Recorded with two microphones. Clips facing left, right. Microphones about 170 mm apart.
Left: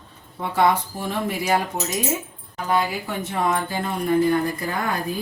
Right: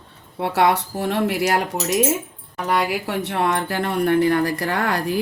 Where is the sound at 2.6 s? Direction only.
75° right (ahead or behind).